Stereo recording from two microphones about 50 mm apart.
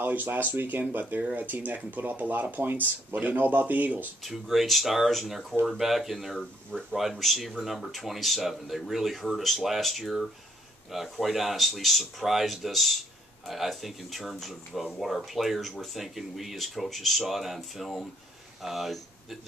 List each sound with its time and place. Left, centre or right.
0.0 s speech: right
4.2 s speech: centre
6.3 s speech: centre